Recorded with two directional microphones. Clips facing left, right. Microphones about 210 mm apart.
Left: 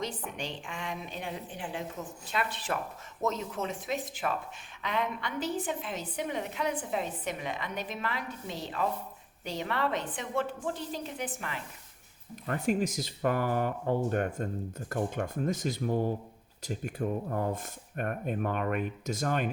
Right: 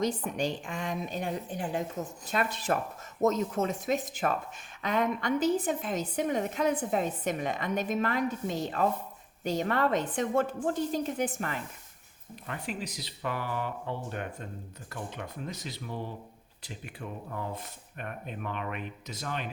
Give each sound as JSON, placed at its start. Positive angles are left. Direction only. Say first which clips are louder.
{"t": 0.0, "sound": "a woman's voice", "louder": "right 7 dB", "side_deg": -40}
{"t": 12.5, "sound": "speech", "louder": "left 8 dB", "side_deg": 45}